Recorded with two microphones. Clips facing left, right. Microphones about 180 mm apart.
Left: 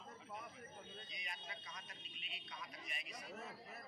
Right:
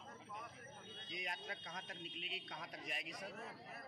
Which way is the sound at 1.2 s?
50° right (ahead or behind).